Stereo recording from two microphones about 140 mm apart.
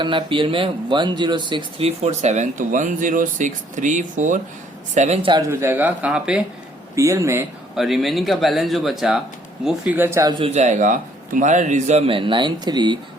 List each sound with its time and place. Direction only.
0.0 s speech: 35° right (ahead or behind)
2.0 s speech: 55° right (ahead or behind)
4.9 s a man's voice: 50° right (ahead or behind)
5.4 s speech: 15° right (ahead or behind)
6.9 s speech: 20° right (ahead or behind)
7.8 s speech: centre (ahead or behind); by 10.4 s 25° right (ahead or behind)
10.4 s a man's voice: 55° right (ahead or behind); by 13.0 s 30° right (ahead or behind)